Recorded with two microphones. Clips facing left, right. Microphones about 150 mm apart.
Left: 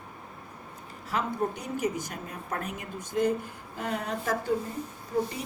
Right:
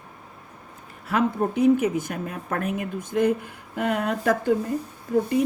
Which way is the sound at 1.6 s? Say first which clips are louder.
Right 11 dB; 55° right (ahead or behind).